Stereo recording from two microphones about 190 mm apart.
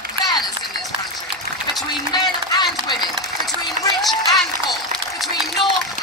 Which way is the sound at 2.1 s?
20° left (ahead or behind).